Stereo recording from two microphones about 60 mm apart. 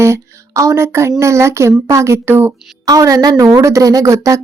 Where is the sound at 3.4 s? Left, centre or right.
Right.